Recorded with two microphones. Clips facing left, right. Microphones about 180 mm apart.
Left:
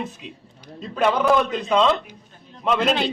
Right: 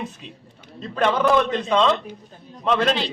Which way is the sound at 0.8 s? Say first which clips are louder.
Even; 5° left (ahead or behind).